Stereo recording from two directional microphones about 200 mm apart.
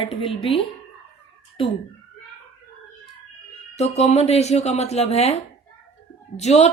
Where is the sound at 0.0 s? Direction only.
30° left (ahead or behind).